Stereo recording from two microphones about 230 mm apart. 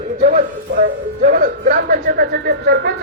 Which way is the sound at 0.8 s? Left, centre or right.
Right.